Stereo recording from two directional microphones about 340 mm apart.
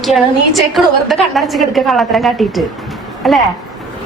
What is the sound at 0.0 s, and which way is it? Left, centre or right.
A woman's voice, centre.